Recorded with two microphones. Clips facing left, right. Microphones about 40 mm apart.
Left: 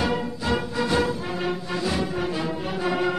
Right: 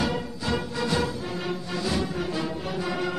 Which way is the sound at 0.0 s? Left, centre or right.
Left.